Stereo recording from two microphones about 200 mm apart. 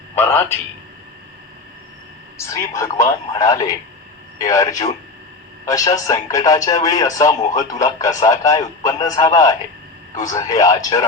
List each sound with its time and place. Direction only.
0.2 s a man's voice: 10° left (ahead or behind)
2.4 s speech: 15° left (ahead or behind)